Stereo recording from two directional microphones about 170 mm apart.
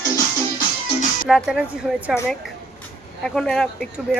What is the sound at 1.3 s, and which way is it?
Speech, centre (ahead or behind).